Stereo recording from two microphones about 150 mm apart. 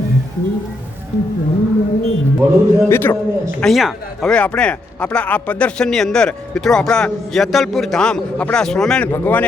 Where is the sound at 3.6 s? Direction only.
Centre (ahead or behind).